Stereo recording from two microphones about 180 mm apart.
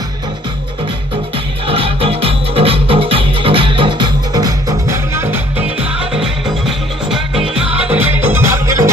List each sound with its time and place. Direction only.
1.6 s music: 30° right (ahead or behind)